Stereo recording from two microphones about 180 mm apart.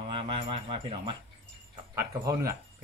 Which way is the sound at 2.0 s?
15° right (ahead or behind).